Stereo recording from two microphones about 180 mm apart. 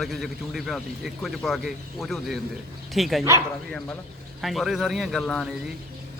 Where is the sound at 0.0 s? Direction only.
Centre (ahead or behind).